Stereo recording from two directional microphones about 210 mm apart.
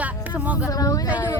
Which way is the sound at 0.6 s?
15° left (ahead or behind).